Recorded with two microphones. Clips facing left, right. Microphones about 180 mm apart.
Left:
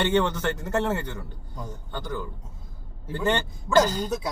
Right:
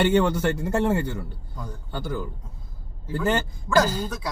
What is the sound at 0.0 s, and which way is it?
A man's voice, 10° right (ahead or behind).